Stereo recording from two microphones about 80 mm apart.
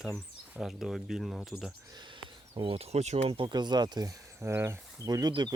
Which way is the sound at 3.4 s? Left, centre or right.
Right.